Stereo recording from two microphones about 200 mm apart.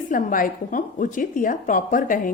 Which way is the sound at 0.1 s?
45° left (ahead or behind).